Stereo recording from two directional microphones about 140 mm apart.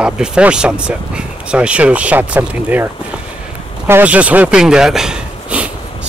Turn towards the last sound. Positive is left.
turn(degrees=-10)  # may be behind; listen again after turning